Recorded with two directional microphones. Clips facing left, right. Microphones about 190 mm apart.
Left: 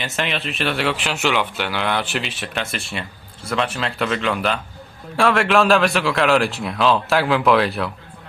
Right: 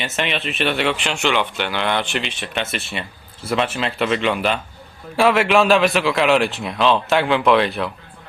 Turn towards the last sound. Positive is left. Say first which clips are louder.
# right 1 dB
turn(degrees=0)  # may be behind; listen again after turning